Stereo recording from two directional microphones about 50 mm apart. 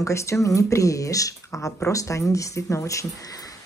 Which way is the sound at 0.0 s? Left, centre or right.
Left.